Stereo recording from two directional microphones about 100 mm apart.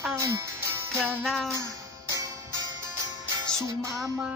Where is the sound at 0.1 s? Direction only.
30° right (ahead or behind).